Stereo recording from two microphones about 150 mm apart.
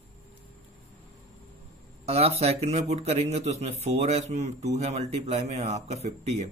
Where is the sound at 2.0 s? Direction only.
45° right (ahead or behind).